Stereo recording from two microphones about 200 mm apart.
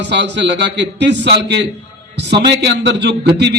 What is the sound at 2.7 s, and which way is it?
Speech, 60° right (ahead or behind).